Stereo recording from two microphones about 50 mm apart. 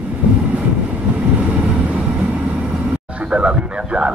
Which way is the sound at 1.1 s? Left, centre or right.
Right.